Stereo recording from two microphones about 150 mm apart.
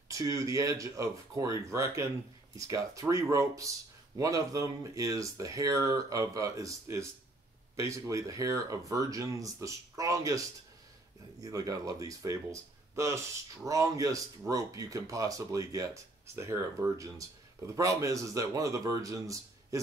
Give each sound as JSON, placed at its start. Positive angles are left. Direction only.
{"t": 0.1, "sound": "speech", "side_deg": -20}
{"t": 11.4, "sound": "speech", "side_deg": -25}